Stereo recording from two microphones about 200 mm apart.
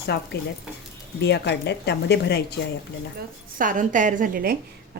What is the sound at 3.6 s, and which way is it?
Speech, 40° right (ahead or behind).